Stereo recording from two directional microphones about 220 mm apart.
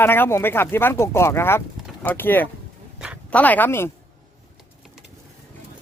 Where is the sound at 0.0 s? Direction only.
10° left (ahead or behind).